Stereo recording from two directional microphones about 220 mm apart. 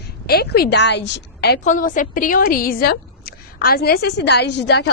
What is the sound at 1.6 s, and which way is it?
A woman's voice, 35° left (ahead or behind).